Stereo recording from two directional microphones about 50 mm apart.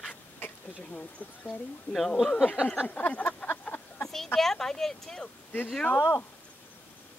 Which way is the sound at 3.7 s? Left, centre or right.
Left.